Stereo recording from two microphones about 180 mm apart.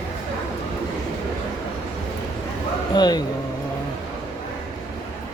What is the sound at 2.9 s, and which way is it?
Speech, 25° left (ahead or behind).